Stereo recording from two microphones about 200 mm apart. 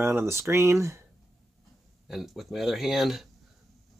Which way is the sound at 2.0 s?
Centre (ahead or behind).